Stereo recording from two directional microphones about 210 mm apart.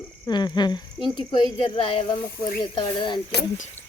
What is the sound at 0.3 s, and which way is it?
Speech, 20° left (ahead or behind).